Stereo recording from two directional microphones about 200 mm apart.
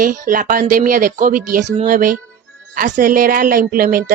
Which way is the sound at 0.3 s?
45° right (ahead or behind).